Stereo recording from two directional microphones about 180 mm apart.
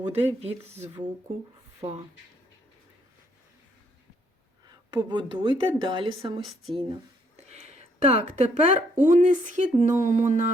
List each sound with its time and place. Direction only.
0.1 s speech: 35° right (ahead or behind)
4.9 s a woman's voice: 25° right (ahead or behind)
6.4 s speech: centre (ahead or behind)
6.7 s speech: 35° right (ahead or behind)